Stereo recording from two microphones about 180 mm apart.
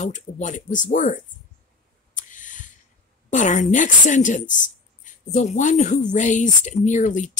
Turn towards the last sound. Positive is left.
turn(degrees=45)  # may be behind; listen again after turning